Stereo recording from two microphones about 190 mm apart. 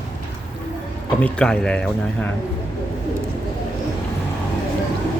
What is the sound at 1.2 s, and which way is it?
Speech, 5° left (ahead or behind).